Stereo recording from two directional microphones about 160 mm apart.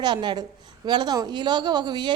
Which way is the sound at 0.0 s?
25° right (ahead or behind).